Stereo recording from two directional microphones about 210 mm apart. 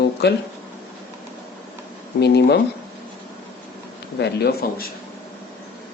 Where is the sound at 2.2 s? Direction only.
55° left (ahead or behind).